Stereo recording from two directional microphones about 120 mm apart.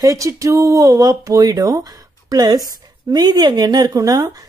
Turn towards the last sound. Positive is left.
turn(degrees=-30)  # may be behind; listen again after turning